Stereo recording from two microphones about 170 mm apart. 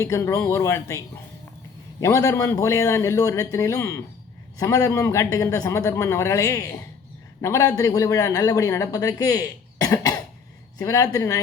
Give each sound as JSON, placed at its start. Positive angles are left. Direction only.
{"t": 0.0, "sound": "a man's voice", "side_deg": 20}